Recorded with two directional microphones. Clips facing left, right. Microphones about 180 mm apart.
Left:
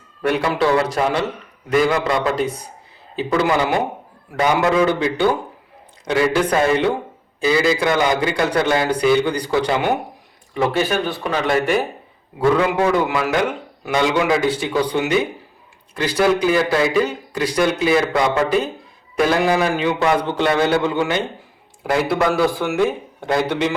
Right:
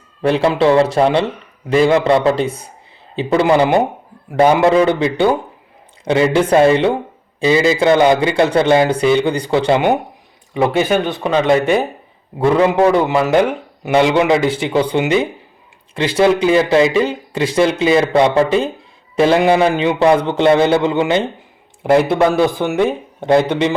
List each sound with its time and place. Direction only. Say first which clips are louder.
0.2 s a man's voice: right 5 dB; 25° right (ahead or behind)